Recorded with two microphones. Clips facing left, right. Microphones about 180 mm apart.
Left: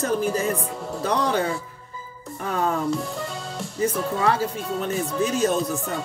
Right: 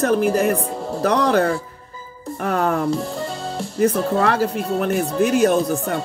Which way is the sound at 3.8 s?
65° right (ahead or behind).